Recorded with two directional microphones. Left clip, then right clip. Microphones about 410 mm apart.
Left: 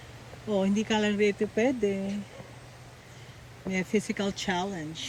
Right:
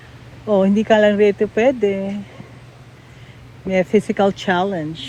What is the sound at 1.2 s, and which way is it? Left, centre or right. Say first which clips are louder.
Speech: right 11 dB; right.